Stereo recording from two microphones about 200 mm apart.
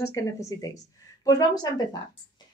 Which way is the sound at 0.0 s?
15° left (ahead or behind).